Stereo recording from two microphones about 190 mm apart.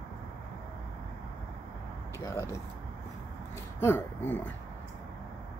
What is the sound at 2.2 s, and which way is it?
Speech, 15° left (ahead or behind).